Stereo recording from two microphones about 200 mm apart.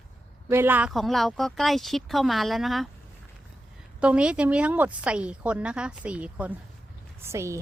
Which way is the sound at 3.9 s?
5° right (ahead or behind).